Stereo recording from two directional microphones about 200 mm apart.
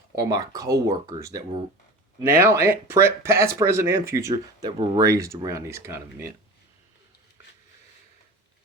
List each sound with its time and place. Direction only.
0.2 s speech: 15° right (ahead or behind)